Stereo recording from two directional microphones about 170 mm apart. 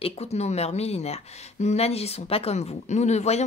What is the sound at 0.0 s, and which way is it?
Speech, 40° left (ahead or behind).